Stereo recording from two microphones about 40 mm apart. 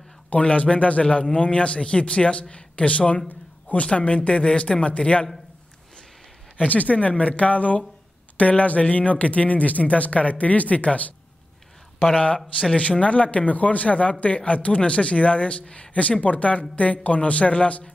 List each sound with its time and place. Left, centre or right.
0.3 s a man's voice: left
6.7 s speech: left
12.5 s a man's voice: left